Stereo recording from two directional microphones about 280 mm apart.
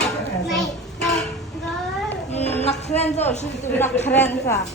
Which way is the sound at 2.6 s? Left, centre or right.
Left.